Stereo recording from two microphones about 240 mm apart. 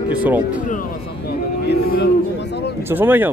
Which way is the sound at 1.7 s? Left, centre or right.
Left.